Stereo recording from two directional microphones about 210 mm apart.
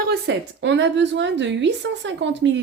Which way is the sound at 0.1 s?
55° right (ahead or behind).